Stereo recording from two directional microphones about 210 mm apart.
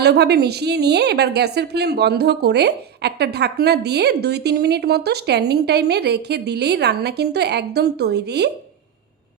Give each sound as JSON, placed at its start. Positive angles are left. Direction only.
{"t": 0.0, "sound": "a woman's voice", "side_deg": -50}